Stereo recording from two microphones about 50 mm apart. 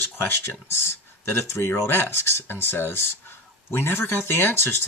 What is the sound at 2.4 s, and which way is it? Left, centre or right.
Speech, left.